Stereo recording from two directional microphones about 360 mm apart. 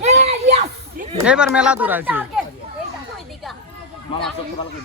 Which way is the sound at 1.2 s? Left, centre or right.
Centre.